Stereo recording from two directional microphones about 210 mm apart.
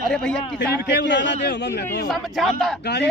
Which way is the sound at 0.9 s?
55° left (ahead or behind).